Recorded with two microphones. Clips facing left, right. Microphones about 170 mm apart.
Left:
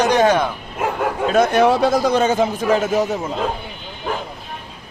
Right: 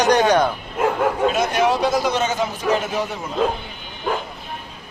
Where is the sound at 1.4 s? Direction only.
55° left (ahead or behind).